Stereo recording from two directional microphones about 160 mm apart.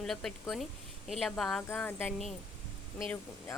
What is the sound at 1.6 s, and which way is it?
Speech, 15° left (ahead or behind).